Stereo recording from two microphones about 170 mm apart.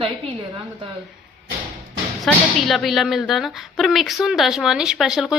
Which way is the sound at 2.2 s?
Centre (ahead or behind).